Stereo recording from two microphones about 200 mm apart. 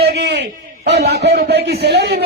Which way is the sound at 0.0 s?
55° right (ahead or behind).